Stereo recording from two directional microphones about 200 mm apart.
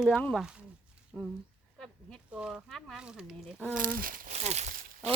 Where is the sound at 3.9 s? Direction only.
45° right (ahead or behind).